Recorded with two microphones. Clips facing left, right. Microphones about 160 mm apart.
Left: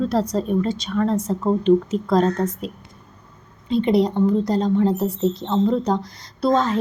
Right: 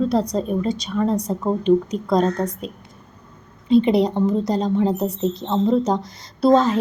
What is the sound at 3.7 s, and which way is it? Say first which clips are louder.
Speech: right 2 dB; 30° right (ahead or behind).